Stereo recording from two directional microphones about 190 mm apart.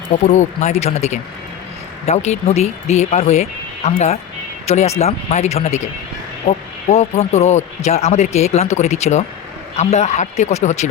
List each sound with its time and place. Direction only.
0.3 s speech: 35° left (ahead or behind)